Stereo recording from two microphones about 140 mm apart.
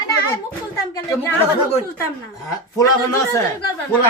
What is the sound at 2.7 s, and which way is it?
Speech, 20° left (ahead or behind).